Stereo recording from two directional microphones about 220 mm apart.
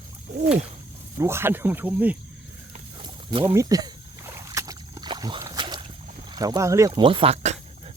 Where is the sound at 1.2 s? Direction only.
10° right (ahead or behind).